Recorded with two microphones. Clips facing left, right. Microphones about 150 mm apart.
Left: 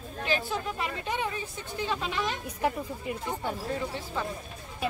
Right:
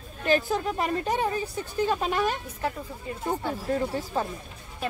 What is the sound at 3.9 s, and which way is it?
Speech, 40° right (ahead or behind).